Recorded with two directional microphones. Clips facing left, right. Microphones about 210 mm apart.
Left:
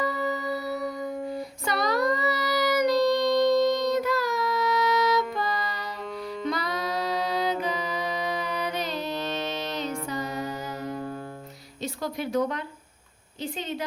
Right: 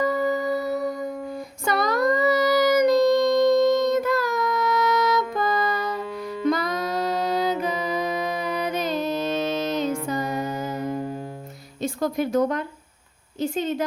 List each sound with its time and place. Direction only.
0.0 s music: 50° right (ahead or behind)
1.6 s child singing: 50° right (ahead or behind)
6.5 s music: 45° right (ahead or behind)
10.9 s music: 15° right (ahead or behind)
11.8 s a woman's voice: 50° right (ahead or behind)